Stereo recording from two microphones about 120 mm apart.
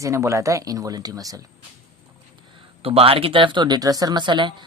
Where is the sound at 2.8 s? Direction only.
50° right (ahead or behind).